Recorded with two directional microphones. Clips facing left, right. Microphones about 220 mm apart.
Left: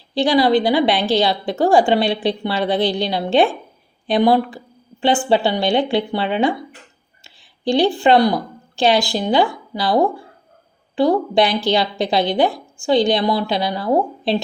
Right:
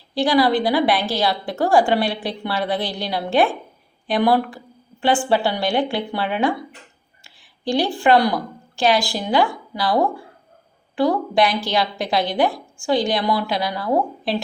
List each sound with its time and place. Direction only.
0.1 s a woman's voice: 25° left (ahead or behind)